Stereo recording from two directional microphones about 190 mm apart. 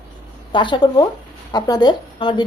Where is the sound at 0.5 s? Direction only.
25° left (ahead or behind).